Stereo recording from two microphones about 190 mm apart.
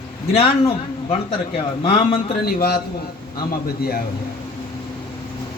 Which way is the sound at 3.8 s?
55° left (ahead or behind).